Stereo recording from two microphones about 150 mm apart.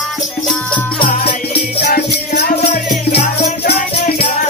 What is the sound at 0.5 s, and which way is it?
Music, 5° left (ahead or behind).